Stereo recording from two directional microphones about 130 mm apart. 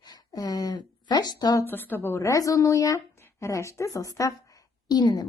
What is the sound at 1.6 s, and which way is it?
A woman's voice, 15° left (ahead or behind).